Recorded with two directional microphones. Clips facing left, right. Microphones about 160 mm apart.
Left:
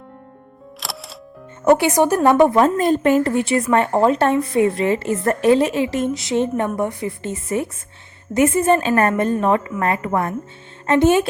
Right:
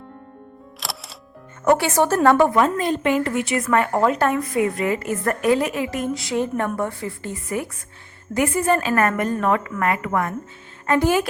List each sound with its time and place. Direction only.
0.8 s music: centre (ahead or behind)
1.6 s a woman's voice: 15° left (ahead or behind)
2.6 s a woman's voice: 40° left (ahead or behind); by 11.3 s 25° left (ahead or behind)